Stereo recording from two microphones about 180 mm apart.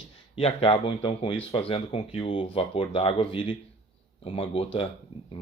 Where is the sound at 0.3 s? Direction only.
30° left (ahead or behind).